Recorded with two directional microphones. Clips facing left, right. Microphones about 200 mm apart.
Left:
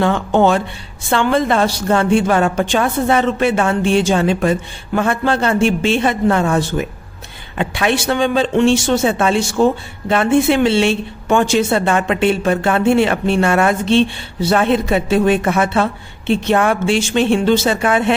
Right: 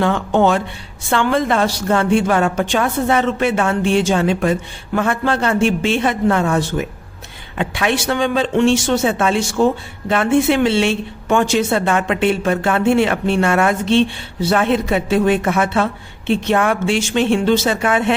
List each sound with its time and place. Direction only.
0.0 s a woman's voice: 30° left (ahead or behind)